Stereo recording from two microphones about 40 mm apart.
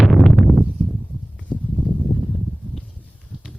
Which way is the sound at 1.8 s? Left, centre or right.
Left.